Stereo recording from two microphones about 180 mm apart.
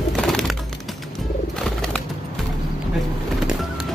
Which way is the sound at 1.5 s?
5° left (ahead or behind).